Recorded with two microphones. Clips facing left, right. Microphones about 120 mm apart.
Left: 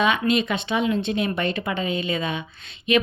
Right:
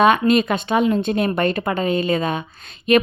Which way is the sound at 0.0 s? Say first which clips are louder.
Right 6 dB; 45° right (ahead or behind).